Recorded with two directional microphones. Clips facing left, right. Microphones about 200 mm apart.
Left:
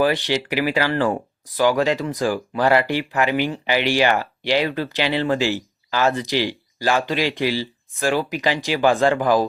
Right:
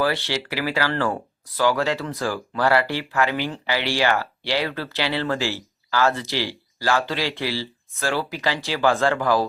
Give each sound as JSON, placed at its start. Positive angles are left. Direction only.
{"t": 0.0, "sound": "speech", "side_deg": 15}